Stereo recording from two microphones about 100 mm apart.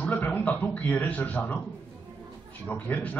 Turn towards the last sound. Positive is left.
turn(degrees=15)  # may be behind; listen again after turning